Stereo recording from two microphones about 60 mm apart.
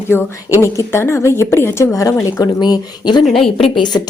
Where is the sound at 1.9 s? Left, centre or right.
Left.